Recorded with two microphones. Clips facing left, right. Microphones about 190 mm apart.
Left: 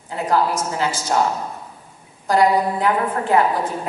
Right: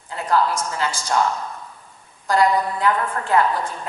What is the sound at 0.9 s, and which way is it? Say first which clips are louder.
Speech: left 3 dB; 10° left (ahead or behind).